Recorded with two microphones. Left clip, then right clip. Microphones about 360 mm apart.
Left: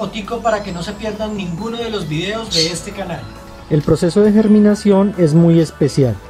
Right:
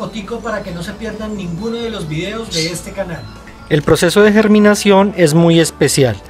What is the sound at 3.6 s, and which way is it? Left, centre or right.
Speech, right.